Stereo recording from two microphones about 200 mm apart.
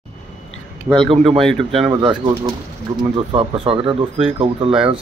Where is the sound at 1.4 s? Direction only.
Centre (ahead or behind).